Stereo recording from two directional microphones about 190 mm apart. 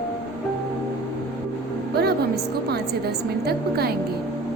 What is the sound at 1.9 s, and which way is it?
Music, 55° right (ahead or behind).